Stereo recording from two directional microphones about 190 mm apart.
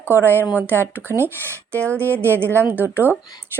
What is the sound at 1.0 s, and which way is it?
Speech, 10° right (ahead or behind).